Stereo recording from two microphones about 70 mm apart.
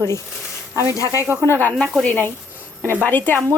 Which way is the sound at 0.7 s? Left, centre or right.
Right.